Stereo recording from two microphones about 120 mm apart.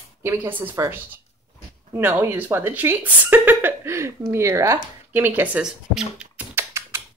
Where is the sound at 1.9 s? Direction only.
20° right (ahead or behind).